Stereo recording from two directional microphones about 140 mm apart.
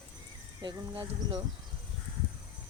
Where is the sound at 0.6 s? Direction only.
35° right (ahead or behind).